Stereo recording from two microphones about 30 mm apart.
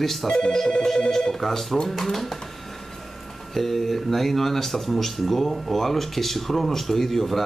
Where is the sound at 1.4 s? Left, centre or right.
Centre.